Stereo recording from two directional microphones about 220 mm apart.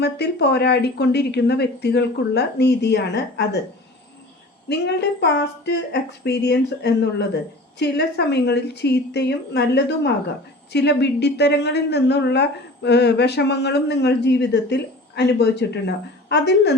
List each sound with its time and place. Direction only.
0.0 s a woman's voice: 50° left (ahead or behind)
4.7 s a woman's voice: 50° left (ahead or behind)